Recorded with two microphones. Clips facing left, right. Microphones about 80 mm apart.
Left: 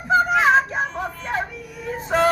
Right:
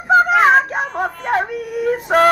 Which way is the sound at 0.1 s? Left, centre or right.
Right.